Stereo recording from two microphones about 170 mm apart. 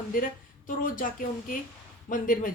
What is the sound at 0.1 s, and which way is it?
Speech, 55° left (ahead or behind).